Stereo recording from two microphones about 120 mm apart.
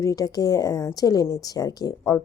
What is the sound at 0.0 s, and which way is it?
A woman's voice, 30° left (ahead or behind).